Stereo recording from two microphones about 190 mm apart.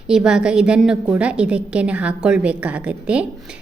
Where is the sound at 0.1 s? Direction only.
5° right (ahead or behind).